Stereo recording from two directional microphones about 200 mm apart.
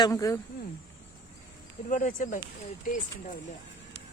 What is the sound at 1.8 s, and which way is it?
Speech, 40° left (ahead or behind).